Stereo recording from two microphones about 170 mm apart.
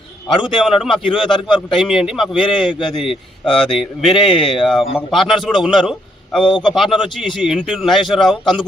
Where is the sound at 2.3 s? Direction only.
30° left (ahead or behind).